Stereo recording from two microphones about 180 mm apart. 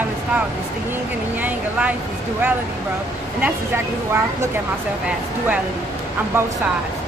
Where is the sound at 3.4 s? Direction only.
10° right (ahead or behind).